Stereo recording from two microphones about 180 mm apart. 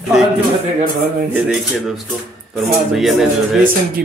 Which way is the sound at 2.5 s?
Centre (ahead or behind).